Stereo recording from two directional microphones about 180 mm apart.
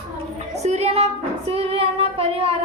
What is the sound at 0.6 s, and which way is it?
Child singing, 35° right (ahead or behind).